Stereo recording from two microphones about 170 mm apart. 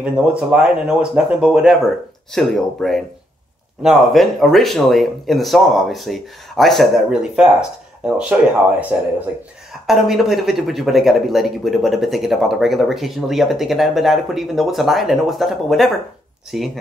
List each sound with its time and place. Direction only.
0.0 s speech: 5° right (ahead or behind)
9.8 s speech: centre (ahead or behind)